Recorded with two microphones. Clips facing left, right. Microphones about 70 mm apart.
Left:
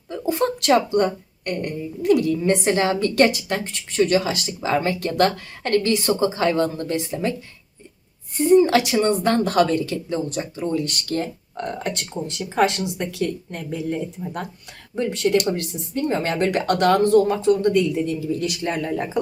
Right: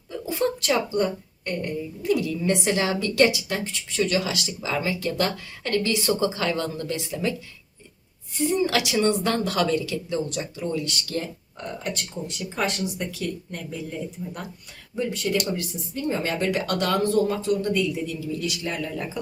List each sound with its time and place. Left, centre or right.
0.1 s a sound: left
0.6 s a woman's voice: left
8.4 s a woman's voice: left
11.5 s speech: left
14.9 s speech: left
18.6 s a woman's voice: left